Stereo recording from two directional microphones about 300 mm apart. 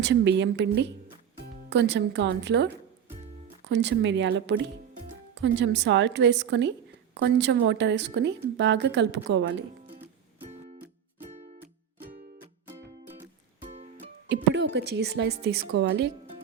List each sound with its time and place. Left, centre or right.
0.0 s a woman's voice: right
3.7 s a woman's voice: right
12.6 s music: centre
13.7 s music: right
14.3 s a woman's voice: right